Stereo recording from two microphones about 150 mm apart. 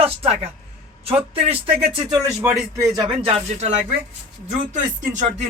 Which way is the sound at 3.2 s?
45° right (ahead or behind).